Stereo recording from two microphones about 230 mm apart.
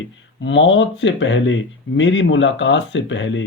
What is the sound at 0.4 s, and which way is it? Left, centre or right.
Speech, left.